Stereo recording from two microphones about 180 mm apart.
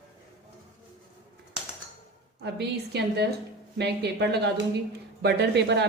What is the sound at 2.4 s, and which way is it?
Speech, 70° right (ahead or behind).